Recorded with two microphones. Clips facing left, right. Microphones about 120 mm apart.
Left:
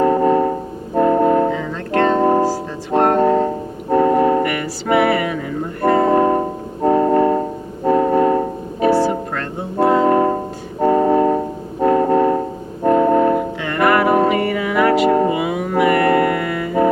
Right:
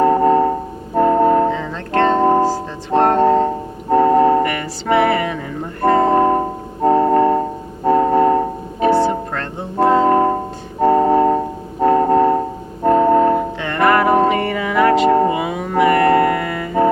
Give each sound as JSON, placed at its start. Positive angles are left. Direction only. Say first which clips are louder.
{"t": 0.0, "sound": "music", "louder": "right 1 dB", "side_deg": -35}
{"t": 8.9, "sound": "music", "louder": "right 1 dB", "side_deg": -25}
{"t": 9.3, "sound": "music", "louder": "left 1 dB", "side_deg": -35}